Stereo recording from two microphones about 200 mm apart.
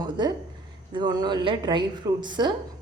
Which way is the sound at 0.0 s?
20° right (ahead or behind).